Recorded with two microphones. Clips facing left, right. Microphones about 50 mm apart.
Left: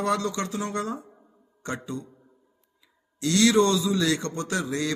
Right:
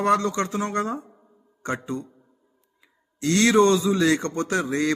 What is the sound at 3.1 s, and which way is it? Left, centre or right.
A man's voice, right.